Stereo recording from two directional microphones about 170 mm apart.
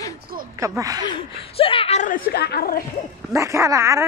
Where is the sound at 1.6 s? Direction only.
35° left (ahead or behind); by 2.8 s 65° left (ahead or behind).